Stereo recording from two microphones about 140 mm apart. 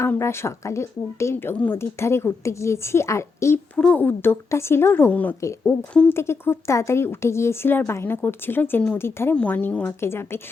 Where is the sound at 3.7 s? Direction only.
10° left (ahead or behind).